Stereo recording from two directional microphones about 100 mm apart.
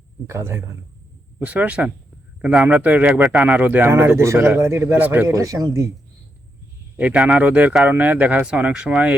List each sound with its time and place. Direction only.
0.3 s speech: 25° right (ahead or behind)
1.4 s speech: 15° right (ahead or behind)
4.9 s speech: 20° right (ahead or behind)
5.3 s speech: 35° right (ahead or behind)
6.9 s speech: 15° right (ahead or behind)